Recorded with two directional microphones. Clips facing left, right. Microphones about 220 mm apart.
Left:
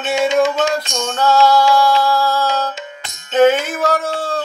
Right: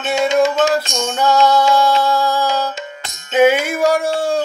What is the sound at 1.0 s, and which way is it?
Music, 15° right (ahead or behind).